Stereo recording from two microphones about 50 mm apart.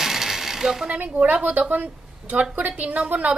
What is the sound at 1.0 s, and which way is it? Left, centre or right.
A woman's voice, right.